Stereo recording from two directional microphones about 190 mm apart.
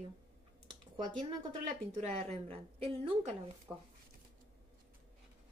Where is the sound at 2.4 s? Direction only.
30° right (ahead or behind).